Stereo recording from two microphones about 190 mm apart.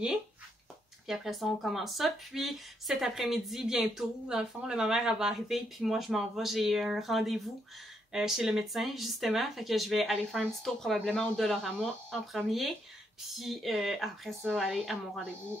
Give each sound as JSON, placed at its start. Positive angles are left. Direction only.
{"t": 1.0, "sound": "speech", "side_deg": 0}